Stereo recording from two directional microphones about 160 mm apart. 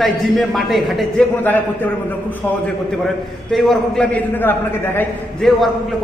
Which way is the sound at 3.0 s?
Centre (ahead or behind).